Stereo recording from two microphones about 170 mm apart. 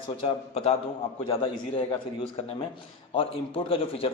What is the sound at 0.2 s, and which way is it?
A man's voice, 35° left (ahead or behind).